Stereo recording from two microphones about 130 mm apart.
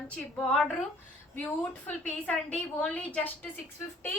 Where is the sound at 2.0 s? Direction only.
10° left (ahead or behind).